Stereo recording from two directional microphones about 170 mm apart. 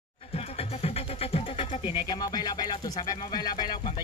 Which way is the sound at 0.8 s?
35° left (ahead or behind).